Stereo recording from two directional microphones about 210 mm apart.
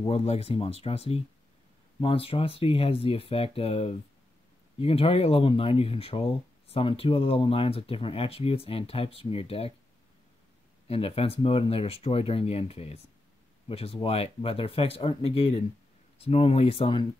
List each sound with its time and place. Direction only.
0.0 s speech: 25° left (ahead or behind)
10.9 s speech: 25° left (ahead or behind)